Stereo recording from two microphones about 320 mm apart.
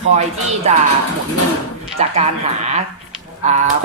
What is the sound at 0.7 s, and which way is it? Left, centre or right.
Speech, right.